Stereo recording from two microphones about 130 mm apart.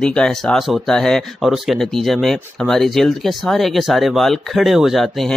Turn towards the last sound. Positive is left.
turn(degrees=0)  # may be behind; listen again after turning